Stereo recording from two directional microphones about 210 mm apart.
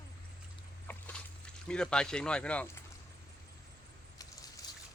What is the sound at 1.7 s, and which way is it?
Speech, 5° left (ahead or behind).